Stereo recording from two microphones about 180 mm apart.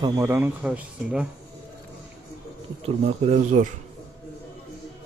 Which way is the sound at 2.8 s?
35° right (ahead or behind).